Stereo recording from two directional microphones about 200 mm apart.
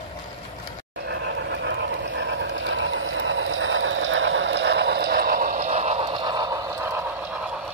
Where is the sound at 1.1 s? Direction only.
60° right (ahead or behind).